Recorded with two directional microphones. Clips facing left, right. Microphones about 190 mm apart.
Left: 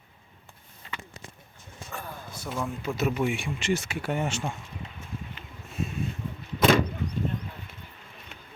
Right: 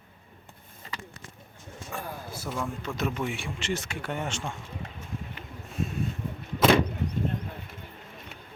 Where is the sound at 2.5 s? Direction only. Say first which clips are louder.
Left 3 dB; 10° left (ahead or behind).